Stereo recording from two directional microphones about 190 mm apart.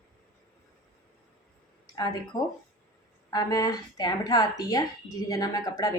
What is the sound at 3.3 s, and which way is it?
A woman's voice, 20° left (ahead or behind).